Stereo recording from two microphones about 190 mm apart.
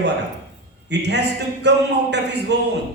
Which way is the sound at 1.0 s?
65° right (ahead or behind).